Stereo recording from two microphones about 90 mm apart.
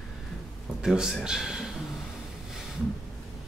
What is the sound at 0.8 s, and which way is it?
Speech, 5° right (ahead or behind).